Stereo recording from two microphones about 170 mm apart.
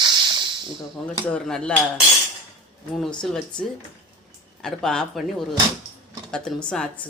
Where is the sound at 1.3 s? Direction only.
5° left (ahead or behind).